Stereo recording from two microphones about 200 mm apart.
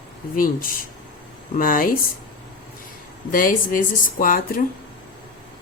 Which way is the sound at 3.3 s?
45° left (ahead or behind).